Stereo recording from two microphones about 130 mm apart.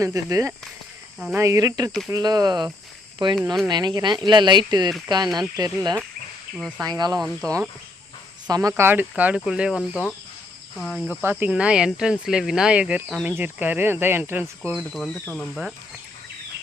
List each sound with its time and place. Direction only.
0.0 s speech: 25° right (ahead or behind)
8.7 s speech: 15° right (ahead or behind); by 11.1 s 5° left (ahead or behind)
11.2 s speech: 15° right (ahead or behind)
14.7 s speech: centre (ahead or behind)